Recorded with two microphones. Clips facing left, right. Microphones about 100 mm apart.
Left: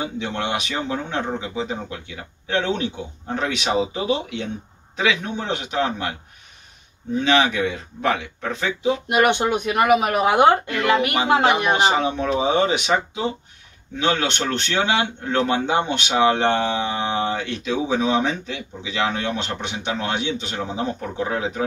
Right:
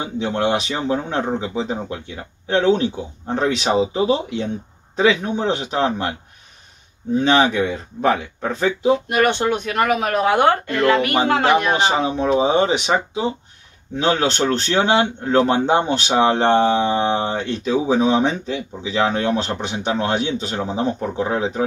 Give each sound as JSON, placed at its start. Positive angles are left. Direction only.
{"t": 0.0, "sound": "a man's voice", "side_deg": -35}
{"t": 7.2, "sound": "a man's voice", "side_deg": -35}
{"t": 9.1, "sound": "speech", "side_deg": 15}
{"t": 12.4, "sound": "a man's voice", "side_deg": -30}